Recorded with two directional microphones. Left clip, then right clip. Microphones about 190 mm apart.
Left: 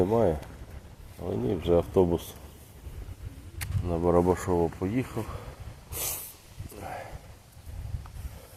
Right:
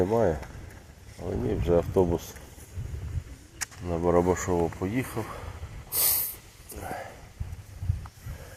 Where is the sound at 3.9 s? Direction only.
10° left (ahead or behind).